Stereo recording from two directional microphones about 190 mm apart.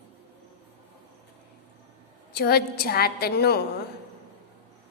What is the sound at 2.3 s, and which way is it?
A woman's voice, 55° left (ahead or behind).